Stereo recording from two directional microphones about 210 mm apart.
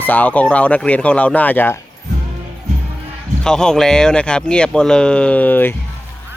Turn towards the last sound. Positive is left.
turn(degrees=10)  # may be behind; listen again after turning